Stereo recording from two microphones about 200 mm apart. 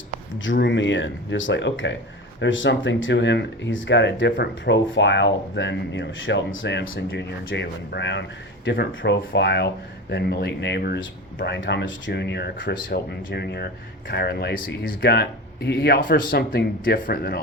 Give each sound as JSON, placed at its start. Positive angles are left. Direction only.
{"t": 0.3, "sound": "speech", "side_deg": 65}